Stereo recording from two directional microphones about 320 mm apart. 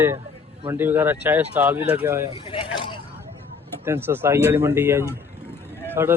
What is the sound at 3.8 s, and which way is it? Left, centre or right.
Speech, centre.